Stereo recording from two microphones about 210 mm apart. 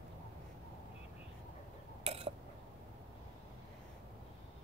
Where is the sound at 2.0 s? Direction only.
30° right (ahead or behind).